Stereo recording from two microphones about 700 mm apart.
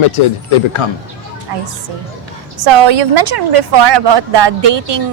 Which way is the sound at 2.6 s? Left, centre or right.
Right.